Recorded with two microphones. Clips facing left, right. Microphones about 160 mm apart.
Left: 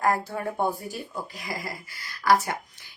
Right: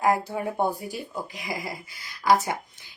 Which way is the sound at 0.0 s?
15° right (ahead or behind).